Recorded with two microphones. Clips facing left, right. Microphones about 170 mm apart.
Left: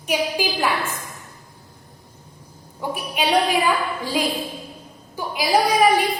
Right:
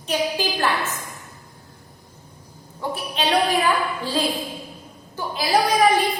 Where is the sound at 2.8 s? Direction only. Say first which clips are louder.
Left 1 dB; 10° left (ahead or behind).